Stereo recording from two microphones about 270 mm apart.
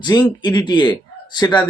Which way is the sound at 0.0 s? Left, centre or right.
Centre.